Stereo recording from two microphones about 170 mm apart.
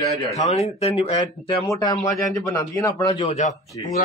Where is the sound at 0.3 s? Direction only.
40° left (ahead or behind).